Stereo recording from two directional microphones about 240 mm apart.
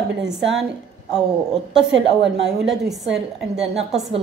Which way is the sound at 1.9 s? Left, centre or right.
Right.